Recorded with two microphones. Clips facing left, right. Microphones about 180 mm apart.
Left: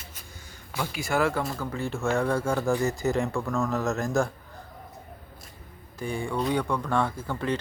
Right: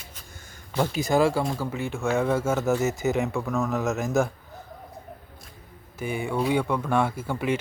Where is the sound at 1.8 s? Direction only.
Centre (ahead or behind).